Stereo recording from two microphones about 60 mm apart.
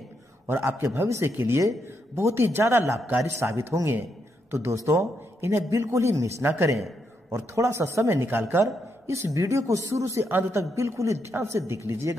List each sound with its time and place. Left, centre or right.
0.5 s a man's voice: right
1.6 s a man's voice: right
9.0 s a woman's voice: right